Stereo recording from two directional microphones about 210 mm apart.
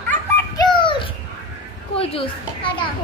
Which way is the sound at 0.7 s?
25° left (ahead or behind).